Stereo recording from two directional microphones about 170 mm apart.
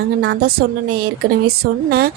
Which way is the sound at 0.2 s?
80° right.